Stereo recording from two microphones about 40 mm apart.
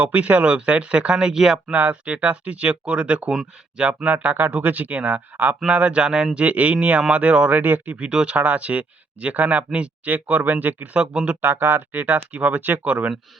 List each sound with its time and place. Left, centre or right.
0.0 s speech: right; by 1.5 s centre
1.7 s speech: right
4.5 s speech: right
5.6 s speech: right
7.9 s speech: right
10.9 s speech: right
11.4 s speech: right
12.0 s speech: right